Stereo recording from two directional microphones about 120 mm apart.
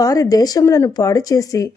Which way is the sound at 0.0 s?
30° left (ahead or behind).